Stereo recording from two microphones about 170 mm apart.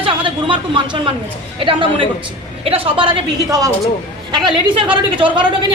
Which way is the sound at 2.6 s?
30° right (ahead or behind).